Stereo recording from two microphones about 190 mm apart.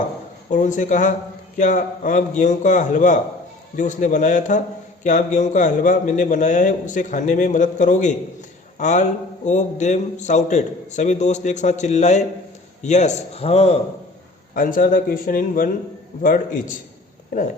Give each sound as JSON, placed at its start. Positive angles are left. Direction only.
{"t": 0.5, "sound": "a man's voice", "side_deg": 40}
{"t": 14.5, "sound": "speech", "side_deg": 45}